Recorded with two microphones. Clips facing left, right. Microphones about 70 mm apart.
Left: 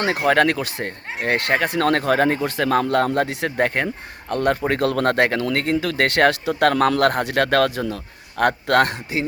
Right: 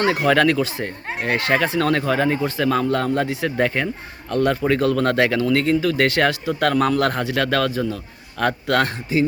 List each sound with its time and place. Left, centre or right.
0.0 s speech: left
0.6 s speech: left